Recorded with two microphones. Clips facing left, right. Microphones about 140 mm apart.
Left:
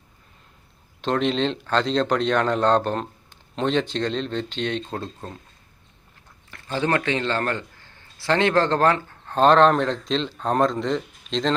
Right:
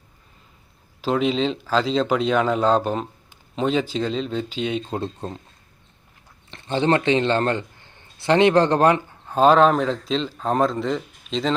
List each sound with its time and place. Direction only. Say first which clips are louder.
1.0 s speech: right 1 dB; 5° right (ahead or behind)
4.9 s speech: right 4 dB; 20° right (ahead or behind)
6.5 s a man's voice: right 4 dB; 25° right (ahead or behind); by 11.5 s 5° right (ahead or behind)